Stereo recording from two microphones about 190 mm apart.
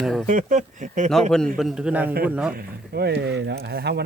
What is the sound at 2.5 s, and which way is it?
Speech, 55° right (ahead or behind).